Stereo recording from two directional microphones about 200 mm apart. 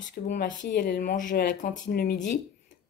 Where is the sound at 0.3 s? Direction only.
40° left (ahead or behind).